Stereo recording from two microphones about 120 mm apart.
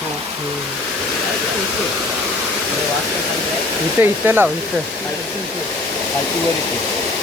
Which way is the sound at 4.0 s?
15° right (ahead or behind).